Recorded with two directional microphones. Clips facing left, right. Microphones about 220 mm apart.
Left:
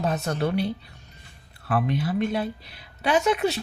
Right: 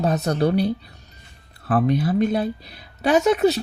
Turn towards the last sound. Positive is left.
turn(degrees=-40)  # may be behind; listen again after turning